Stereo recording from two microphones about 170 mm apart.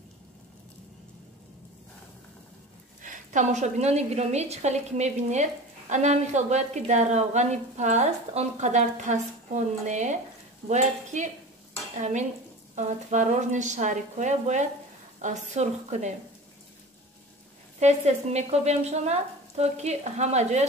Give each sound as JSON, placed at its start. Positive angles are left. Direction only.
{"t": 3.0, "sound": "a woman's voice", "side_deg": -45}
{"t": 17.7, "sound": "speech", "side_deg": -40}